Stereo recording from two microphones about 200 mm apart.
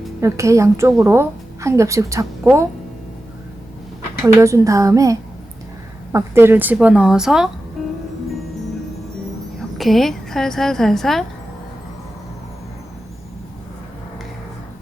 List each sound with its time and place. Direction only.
0.2 s a woman's voice: 15° right (ahead or behind)
4.4 s a woman's voice: 15° right (ahead or behind)
9.7 s a woman's voice: centre (ahead or behind)